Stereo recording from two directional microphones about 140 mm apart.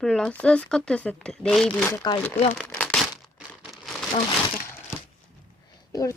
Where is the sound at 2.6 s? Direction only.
10° left (ahead or behind).